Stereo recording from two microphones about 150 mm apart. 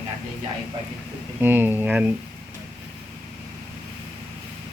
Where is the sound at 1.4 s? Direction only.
15° right (ahead or behind).